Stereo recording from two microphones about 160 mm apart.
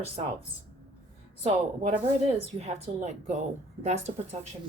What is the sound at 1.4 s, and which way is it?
Speech, 40° right (ahead or behind).